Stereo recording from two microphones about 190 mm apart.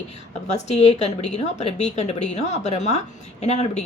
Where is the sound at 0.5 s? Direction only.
35° left (ahead or behind).